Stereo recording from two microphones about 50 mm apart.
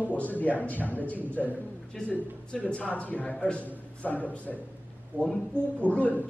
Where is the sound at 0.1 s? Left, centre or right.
Left.